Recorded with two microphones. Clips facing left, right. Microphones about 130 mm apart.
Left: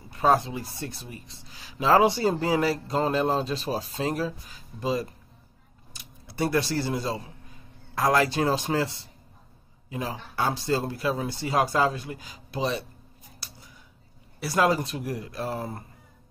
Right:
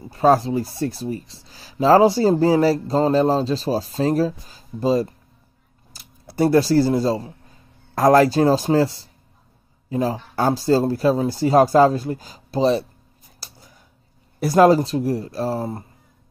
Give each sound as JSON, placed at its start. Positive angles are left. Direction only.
{"t": 0.1, "sound": "speech", "side_deg": -35}
{"t": 13.4, "sound": "whispering", "side_deg": -40}
{"t": 14.4, "sound": "speech", "side_deg": -40}